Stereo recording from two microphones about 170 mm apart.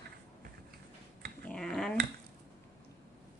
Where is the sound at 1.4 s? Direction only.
5° left (ahead or behind).